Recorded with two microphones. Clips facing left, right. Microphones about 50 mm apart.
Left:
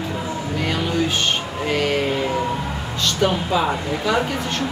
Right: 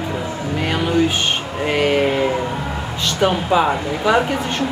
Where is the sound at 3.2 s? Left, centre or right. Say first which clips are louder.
Right 4 dB; centre.